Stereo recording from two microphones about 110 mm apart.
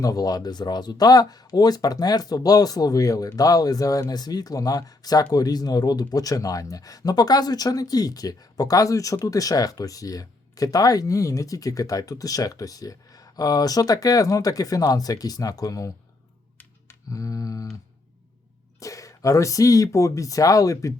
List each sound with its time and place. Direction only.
0.0 s speech: 35° left (ahead or behind)
17.1 s speech: 30° left (ahead or behind)
18.8 s speech: 30° left (ahead or behind)